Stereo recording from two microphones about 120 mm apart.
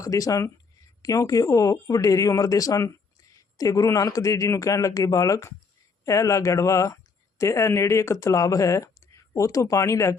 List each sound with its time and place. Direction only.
0.0 s speech: 30° left (ahead or behind)